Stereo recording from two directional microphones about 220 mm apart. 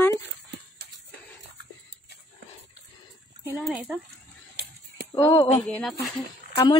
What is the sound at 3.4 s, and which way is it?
Speech, 5° right (ahead or behind).